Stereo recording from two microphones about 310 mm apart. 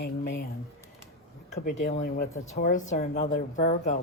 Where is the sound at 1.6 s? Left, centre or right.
Left.